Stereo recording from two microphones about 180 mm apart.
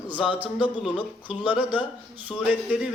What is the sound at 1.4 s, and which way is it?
Speech, 10° right (ahead or behind).